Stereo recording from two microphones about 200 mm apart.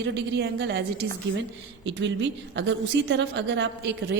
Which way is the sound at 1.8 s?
65° right (ahead or behind).